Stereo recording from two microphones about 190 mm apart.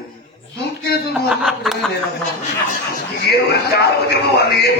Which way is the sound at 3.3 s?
60° left (ahead or behind).